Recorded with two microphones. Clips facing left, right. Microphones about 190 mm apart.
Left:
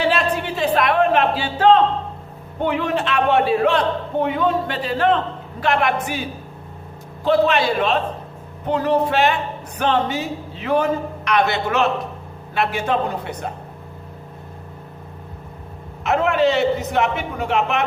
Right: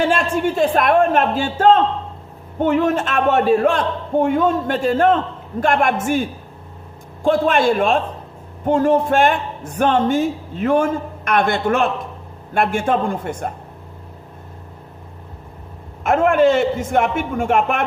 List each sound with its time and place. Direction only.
0.0 s a man's voice: 45° right (ahead or behind)
7.3 s a man's voice: 50° right (ahead or behind)
16.0 s a man's voice: 50° right (ahead or behind)